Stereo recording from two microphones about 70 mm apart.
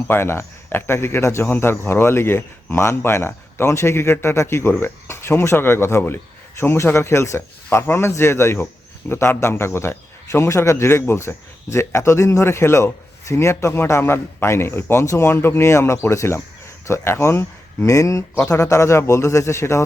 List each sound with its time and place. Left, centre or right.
0.1 s speech: left
15.0 s speech: left
15.3 s speech: left
15.6 s speech: left
17.8 s speech: left